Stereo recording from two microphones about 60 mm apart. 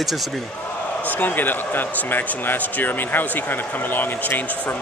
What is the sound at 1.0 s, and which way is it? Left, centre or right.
Speech, left.